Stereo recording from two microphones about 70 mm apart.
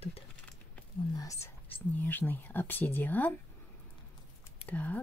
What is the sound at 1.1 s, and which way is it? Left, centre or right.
Speech, left.